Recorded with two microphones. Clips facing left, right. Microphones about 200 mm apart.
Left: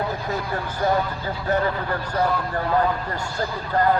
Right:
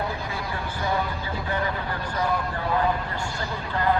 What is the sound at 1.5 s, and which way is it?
Speech, 40° left (ahead or behind).